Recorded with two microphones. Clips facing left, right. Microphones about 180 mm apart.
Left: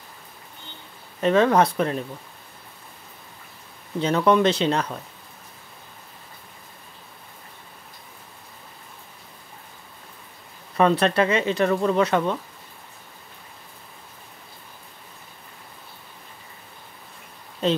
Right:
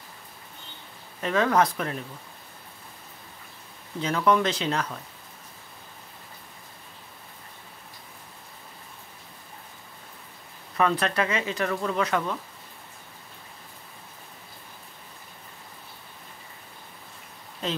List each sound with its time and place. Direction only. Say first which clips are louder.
1.2 s speech: left 5 dB; 25° left (ahead or behind)
4.0 s speech: left 4 dB; 30° left (ahead or behind)
10.8 s speech: left 6 dB; 30° left (ahead or behind)